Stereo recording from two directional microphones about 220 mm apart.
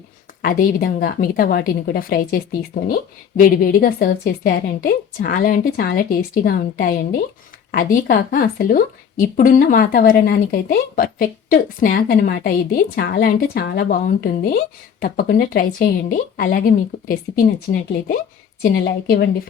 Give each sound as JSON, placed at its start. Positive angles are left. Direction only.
{"t": 0.4, "sound": "a woman's voice", "side_deg": 40}